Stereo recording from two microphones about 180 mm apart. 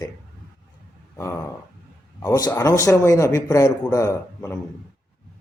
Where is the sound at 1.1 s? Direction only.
15° left (ahead or behind).